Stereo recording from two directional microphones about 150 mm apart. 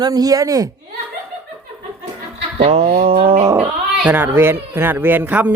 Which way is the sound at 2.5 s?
40° right (ahead or behind).